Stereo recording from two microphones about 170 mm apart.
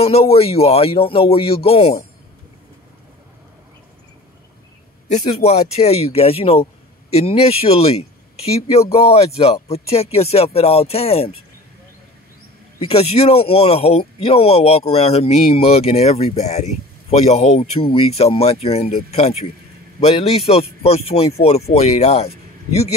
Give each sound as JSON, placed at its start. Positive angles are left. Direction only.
{"t": 0.0, "sound": "speech", "side_deg": 35}
{"t": 5.0, "sound": "speech", "side_deg": 40}
{"t": 12.7, "sound": "speech", "side_deg": 35}